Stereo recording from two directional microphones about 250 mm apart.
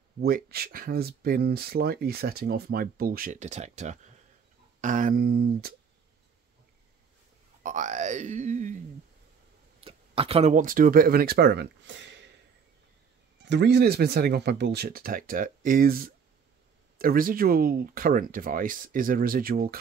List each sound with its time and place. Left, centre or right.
0.5 s speech: right
7.6 s speech: right
13.4 s speech: right